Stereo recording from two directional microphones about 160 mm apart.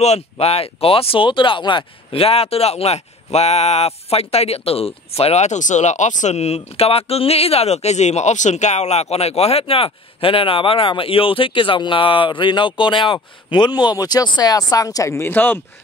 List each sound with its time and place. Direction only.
0.0 s speech: 40° left (ahead or behind); by 15.6 s 15° left (ahead or behind)